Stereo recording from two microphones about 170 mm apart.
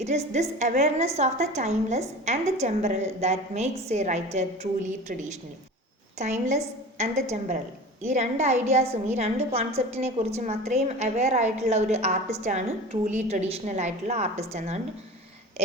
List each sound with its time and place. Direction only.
0.0 s a woman's voice: 40° right (ahead or behind)
8.1 s a woman's voice: 40° right (ahead or behind)